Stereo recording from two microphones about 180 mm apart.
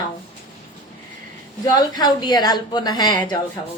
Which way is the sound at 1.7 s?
25° left (ahead or behind).